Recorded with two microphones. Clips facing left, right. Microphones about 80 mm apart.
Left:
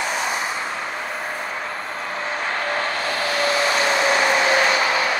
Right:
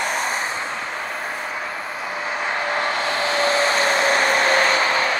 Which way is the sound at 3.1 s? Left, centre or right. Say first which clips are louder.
Right 1 dB; right.